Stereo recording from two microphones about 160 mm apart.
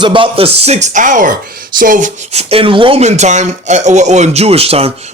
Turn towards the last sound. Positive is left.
turn(degrees=-40)  # may be behind; listen again after turning